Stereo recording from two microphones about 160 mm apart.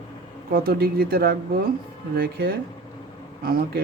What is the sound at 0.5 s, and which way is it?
Speech, 70° right (ahead or behind).